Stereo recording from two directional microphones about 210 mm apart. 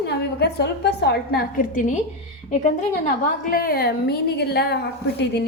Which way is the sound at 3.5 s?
45° left (ahead or behind).